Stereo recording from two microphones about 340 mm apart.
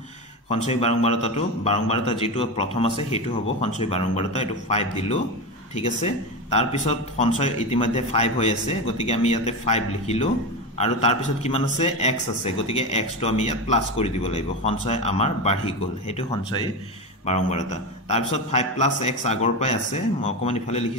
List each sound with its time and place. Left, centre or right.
0.5 s speech: centre